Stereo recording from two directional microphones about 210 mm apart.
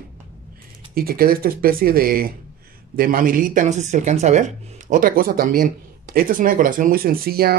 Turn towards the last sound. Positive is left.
turn(degrees=-45)  # may be behind; listen again after turning